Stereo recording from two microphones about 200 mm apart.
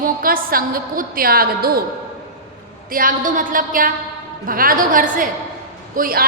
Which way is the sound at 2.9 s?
45° right (ahead or behind).